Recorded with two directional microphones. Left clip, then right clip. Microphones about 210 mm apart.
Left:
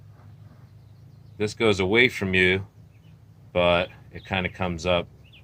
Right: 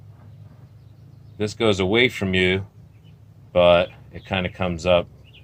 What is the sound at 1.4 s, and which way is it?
Speech, 5° right (ahead or behind).